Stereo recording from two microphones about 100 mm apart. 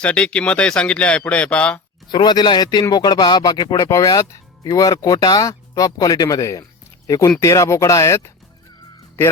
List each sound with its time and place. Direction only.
0.0 s speech: 10° left (ahead or behind)
2.0 s speech: 45° left (ahead or behind); by 8.3 s 30° left (ahead or behind)